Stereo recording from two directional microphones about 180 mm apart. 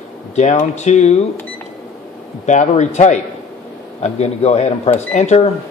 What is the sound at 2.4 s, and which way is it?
Speech, 40° left (ahead or behind).